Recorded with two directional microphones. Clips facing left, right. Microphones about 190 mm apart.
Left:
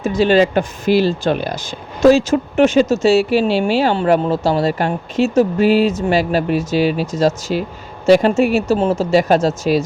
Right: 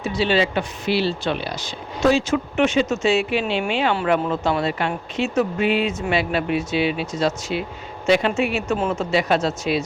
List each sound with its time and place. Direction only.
0.0 s speech: 50° left (ahead or behind)